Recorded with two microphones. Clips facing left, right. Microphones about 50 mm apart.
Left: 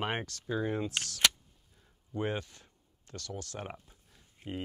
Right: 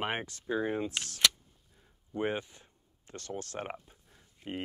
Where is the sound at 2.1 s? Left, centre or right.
Right.